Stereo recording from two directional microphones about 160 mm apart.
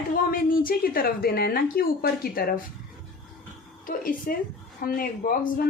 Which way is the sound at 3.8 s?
60° left (ahead or behind).